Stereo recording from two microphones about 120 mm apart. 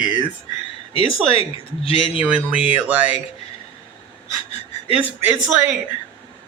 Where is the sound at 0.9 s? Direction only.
50° left (ahead or behind).